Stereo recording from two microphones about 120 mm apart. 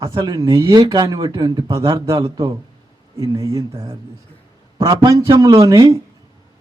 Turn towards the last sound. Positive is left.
turn(degrees=-30)  # may be behind; listen again after turning